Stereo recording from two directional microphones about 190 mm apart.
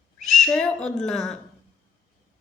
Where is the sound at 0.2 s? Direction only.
Centre (ahead or behind).